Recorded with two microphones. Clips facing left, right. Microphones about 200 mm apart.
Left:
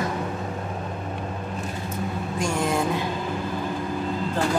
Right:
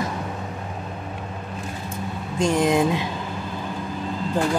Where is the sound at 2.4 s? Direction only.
20° right (ahead or behind).